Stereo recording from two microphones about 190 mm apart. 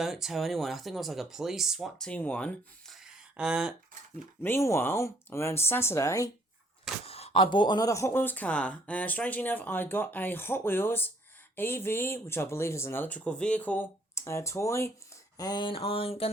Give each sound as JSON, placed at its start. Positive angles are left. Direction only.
{"t": 0.0, "sound": "speech", "side_deg": 0}
{"t": 4.4, "sound": "speech", "side_deg": 10}
{"t": 7.0, "sound": "speech", "side_deg": 30}